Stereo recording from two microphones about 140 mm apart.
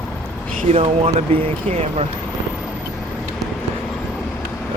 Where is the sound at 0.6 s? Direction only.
45° right (ahead or behind).